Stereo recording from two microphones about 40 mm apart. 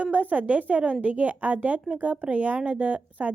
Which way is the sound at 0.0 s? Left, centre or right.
Right.